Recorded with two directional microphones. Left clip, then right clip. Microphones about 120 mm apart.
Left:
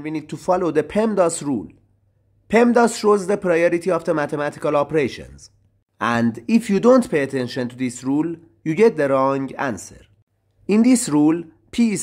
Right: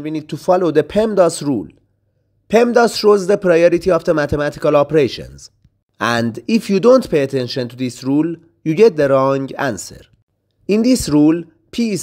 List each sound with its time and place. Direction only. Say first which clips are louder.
0.0 s a man's voice: right 5 dB; 25° right (ahead or behind); by 10.1 s 45° right (ahead or behind)
10.7 s speech: right 3 dB; 25° right (ahead or behind)